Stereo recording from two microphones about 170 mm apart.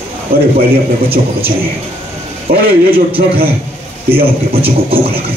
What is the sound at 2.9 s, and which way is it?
Speech, 35° right (ahead or behind).